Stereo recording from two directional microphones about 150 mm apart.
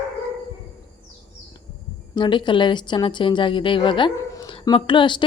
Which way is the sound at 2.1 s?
30° left (ahead or behind).